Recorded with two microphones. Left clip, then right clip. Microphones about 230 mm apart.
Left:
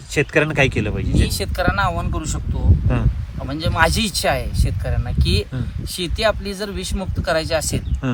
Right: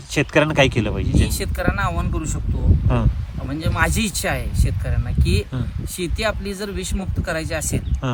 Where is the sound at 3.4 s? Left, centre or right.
Centre.